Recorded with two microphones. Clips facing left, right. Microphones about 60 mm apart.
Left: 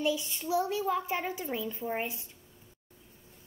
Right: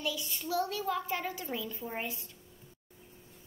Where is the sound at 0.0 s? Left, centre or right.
Left.